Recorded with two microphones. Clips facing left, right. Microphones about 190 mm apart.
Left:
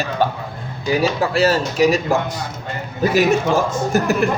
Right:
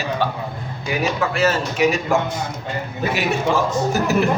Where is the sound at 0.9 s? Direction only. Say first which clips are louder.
Left 4 dB; 35° left (ahead or behind).